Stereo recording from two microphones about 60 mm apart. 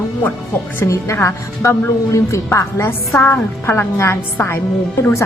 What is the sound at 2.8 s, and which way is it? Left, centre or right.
A woman's voice, left.